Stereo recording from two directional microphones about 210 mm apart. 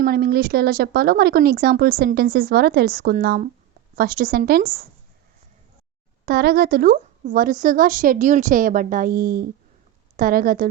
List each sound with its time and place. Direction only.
0.0 s a woman's voice: 50° right (ahead or behind)
6.2 s a woman's voice: 50° right (ahead or behind)